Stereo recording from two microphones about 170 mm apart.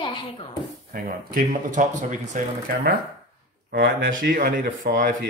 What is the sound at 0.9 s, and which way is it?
Speech, 55° right (ahead or behind).